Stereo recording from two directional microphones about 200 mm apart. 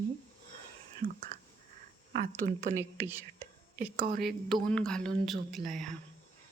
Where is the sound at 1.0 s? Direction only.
20° left (ahead or behind).